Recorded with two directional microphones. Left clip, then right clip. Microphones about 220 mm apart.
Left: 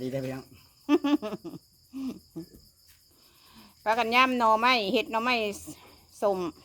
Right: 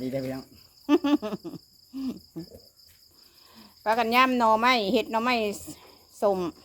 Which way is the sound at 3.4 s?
Centre (ahead or behind).